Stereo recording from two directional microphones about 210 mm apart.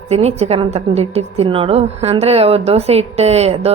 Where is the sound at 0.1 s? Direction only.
30° right (ahead or behind).